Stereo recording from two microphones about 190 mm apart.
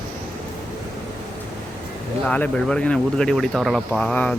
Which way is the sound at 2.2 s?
5° left (ahead or behind).